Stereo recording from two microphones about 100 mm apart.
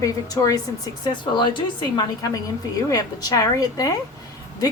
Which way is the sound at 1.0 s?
45° left (ahead or behind).